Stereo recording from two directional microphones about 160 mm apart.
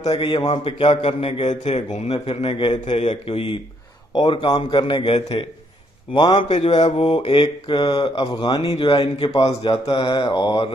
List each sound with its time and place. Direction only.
0.1 s mantra: 30° left (ahead or behind)
6.1 s a man's voice: 30° left (ahead or behind)
6.7 s mantra: 30° left (ahead or behind)